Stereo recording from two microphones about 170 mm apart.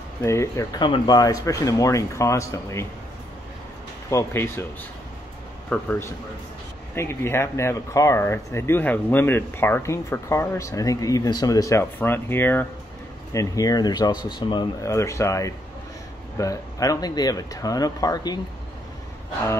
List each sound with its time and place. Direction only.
0.2 s speech: 15° left (ahead or behind)
4.1 s speech: 15° left (ahead or behind)
5.7 s speech: 10° left (ahead or behind)